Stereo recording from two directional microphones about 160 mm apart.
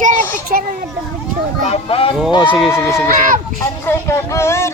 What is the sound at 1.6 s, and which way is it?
Speech, 40° left (ahead or behind).